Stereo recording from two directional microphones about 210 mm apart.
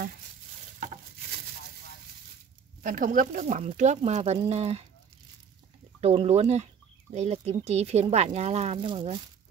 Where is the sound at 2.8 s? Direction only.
40° right (ahead or behind).